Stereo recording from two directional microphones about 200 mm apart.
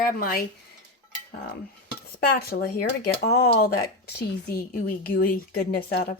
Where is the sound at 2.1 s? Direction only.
50° left (ahead or behind).